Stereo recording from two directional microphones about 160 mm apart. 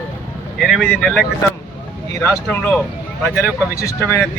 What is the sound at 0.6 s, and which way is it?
A man's voice, centre (ahead or behind).